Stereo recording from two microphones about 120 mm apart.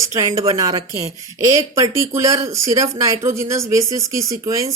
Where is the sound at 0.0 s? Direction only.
25° right (ahead or behind).